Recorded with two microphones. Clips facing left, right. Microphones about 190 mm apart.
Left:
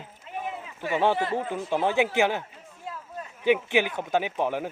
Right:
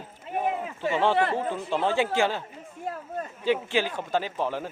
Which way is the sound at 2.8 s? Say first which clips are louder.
Right 5 dB; 50° right (ahead or behind).